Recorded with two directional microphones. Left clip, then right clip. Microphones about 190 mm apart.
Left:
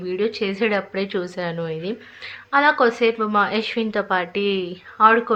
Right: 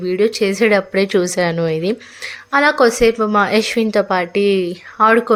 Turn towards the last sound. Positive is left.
turn(degrees=-40)  # may be behind; listen again after turning